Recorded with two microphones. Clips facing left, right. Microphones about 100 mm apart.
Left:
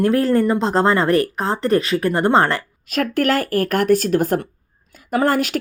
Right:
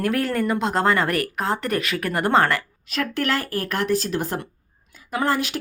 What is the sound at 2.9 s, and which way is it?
Speech, 45° left (ahead or behind).